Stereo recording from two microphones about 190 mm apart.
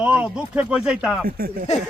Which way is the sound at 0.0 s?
5° right (ahead or behind).